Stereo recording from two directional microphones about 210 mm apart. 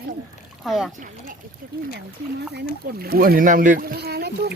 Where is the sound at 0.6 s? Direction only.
Centre (ahead or behind).